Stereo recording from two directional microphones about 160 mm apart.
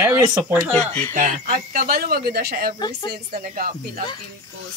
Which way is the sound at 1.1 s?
55° right (ahead or behind).